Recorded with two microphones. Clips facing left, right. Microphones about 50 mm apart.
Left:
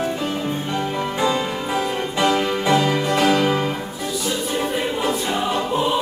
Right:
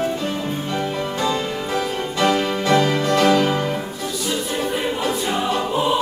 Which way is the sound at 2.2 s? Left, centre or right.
Centre.